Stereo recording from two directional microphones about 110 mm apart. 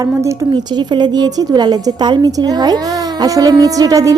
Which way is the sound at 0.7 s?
40° right (ahead or behind).